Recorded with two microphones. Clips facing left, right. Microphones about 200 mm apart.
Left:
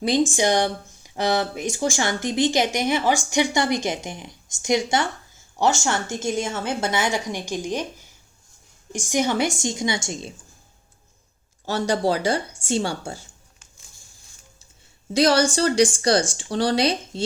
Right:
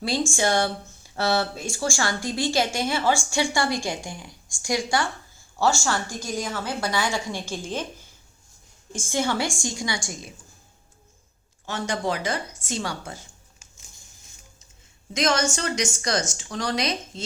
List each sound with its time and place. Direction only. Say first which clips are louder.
0.0 s speech: left 5 dB; 20° left (ahead or behind)
11.6 s a woman's voice: left 6 dB; 35° left (ahead or behind)
15.1 s a woman's voice: left 6 dB; 35° left (ahead or behind)